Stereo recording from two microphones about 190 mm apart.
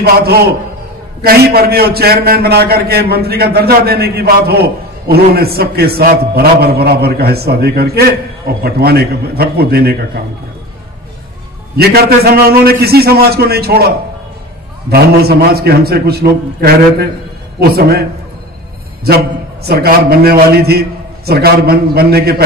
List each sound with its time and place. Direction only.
0.0 s a man's voice: 55° right (ahead or behind)
11.7 s a man's voice: 55° right (ahead or behind)
19.0 s a man's voice: 55° right (ahead or behind)